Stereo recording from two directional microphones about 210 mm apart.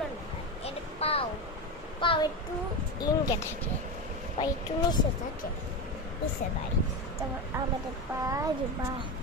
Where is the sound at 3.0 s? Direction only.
15° left (ahead or behind).